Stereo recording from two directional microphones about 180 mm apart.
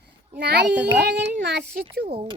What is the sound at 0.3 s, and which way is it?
A child's voice, 65° right (ahead or behind).